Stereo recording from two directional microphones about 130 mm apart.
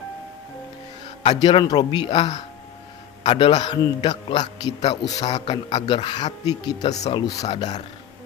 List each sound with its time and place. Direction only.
1.4 s a man's voice: 40° left (ahead or behind)